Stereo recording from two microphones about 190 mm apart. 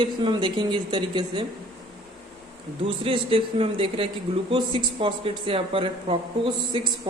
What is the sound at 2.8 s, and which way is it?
Speech, 30° right (ahead or behind).